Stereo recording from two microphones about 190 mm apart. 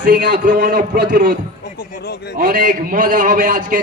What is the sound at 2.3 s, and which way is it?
A man's voice, 50° right (ahead or behind).